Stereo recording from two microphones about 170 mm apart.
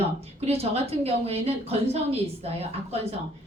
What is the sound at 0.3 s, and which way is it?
A woman's voice, 35° right (ahead or behind).